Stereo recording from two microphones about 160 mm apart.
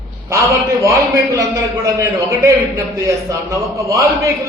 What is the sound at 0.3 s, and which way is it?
A man's voice, 20° right (ahead or behind).